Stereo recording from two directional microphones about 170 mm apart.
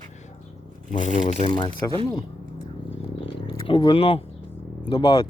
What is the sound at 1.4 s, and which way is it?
Speech, 30° left (ahead or behind).